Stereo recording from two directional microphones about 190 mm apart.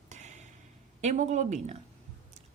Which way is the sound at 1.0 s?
40° right (ahead or behind).